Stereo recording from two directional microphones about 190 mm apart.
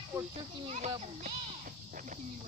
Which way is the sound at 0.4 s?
35° right (ahead or behind).